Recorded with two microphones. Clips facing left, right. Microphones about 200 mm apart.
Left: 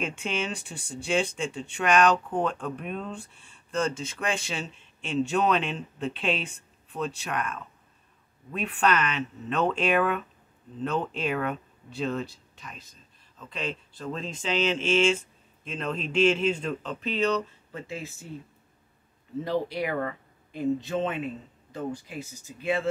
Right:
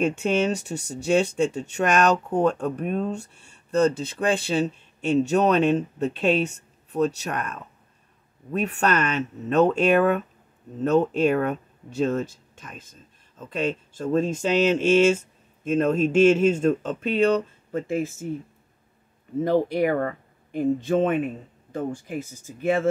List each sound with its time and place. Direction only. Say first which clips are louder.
0.0 s speech: right 9 dB; 45° right (ahead or behind)
19.4 s speech: right 8 dB; 50° right (ahead or behind)